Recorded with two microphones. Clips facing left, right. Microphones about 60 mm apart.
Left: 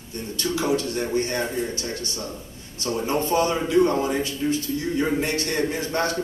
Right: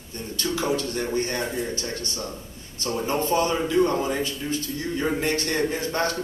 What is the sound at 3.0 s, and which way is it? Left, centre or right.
A man's voice, left.